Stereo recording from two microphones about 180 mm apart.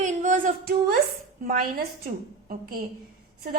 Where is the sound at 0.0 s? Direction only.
45° right (ahead or behind).